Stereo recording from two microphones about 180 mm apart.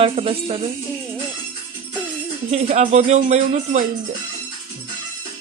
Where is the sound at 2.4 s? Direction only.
40° right (ahead or behind).